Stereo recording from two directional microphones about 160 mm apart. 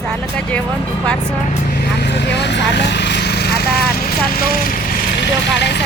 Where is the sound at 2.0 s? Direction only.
90° left; by 4.8 s 65° left (ahead or behind).